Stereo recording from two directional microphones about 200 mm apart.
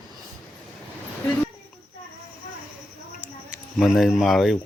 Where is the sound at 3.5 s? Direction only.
Centre (ahead or behind).